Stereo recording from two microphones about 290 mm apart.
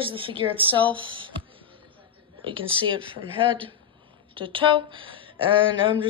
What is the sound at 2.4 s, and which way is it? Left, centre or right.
A woman's voice, centre.